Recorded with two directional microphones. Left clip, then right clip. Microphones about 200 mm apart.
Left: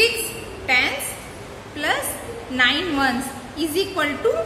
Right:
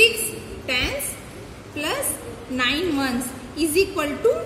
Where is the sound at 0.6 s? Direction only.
20° right (ahead or behind).